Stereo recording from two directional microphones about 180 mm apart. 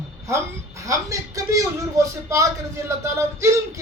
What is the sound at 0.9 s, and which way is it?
A man's voice, 20° right (ahead or behind).